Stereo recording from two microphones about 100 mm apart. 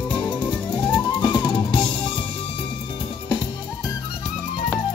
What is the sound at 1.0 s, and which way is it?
Music, 50° left (ahead or behind).